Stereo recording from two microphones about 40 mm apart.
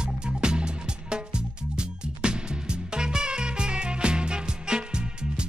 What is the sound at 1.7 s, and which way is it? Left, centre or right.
Music, right.